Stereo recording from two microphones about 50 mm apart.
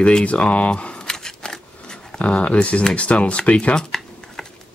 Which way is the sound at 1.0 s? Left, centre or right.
Centre.